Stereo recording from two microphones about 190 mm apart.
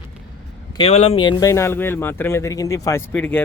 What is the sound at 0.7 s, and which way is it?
Speech, 30° left (ahead or behind).